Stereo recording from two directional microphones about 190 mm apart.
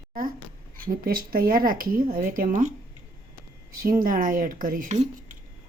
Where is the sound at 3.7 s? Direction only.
50° right (ahead or behind).